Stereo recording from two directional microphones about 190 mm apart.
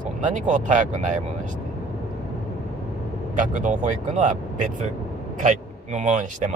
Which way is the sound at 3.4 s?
40° right (ahead or behind).